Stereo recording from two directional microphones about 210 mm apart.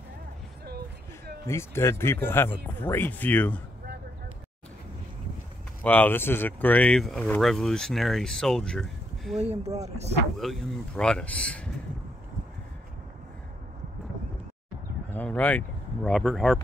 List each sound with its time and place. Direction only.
1.5 s speech: 10° left (ahead or behind)
5.8 s speech: 10° left (ahead or behind)
9.4 s speech: 30° right (ahead or behind)
10.4 s speech: centre (ahead or behind)
15.0 s speech: 5° left (ahead or behind)